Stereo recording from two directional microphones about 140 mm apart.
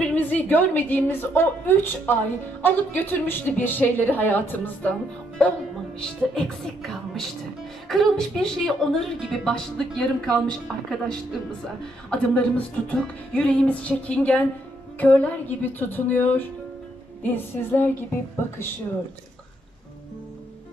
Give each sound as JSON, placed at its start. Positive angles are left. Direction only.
{"t": 0.0, "sound": "a woman's voice", "side_deg": 10}
{"t": 5.9, "sound": "a woman's voice", "side_deg": 5}